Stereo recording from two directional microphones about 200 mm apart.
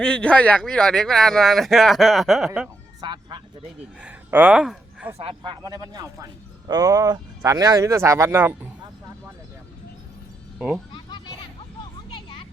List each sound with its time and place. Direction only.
0.0 s speech: 5° left (ahead or behind)
2.5 s music: 15° right (ahead or behind)
4.0 s speech: 10° right (ahead or behind)
5.1 s speech: 25° right (ahead or behind)
10.9 s children playing: 20° left (ahead or behind)
12.1 s vehicle: 25° left (ahead or behind)